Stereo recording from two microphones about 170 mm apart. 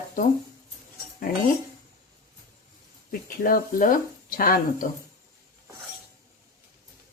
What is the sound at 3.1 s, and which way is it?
Speech, 55° left (ahead or behind).